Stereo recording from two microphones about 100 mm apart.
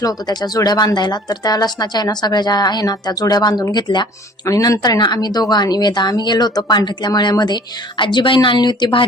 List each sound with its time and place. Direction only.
0.0 s speech: 40° left (ahead or behind)
4.4 s speech: 35° left (ahead or behind); by 9.0 s 50° left (ahead or behind)